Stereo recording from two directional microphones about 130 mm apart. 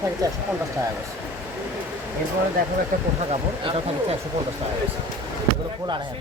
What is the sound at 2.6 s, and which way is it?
Speech, 90° right.